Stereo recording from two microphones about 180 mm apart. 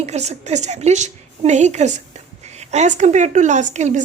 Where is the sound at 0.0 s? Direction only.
35° right (ahead or behind).